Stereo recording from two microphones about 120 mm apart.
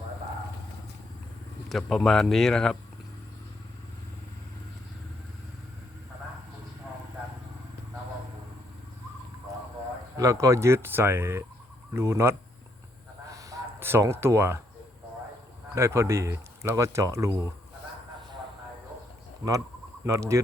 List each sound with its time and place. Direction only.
1.7 s speech: centre (ahead or behind)
10.2 s speech: 30° right (ahead or behind)
13.3 s a sound: 25° right (ahead or behind)
15.7 s speech: 25° right (ahead or behind)
20.1 s speech: 25° right (ahead or behind)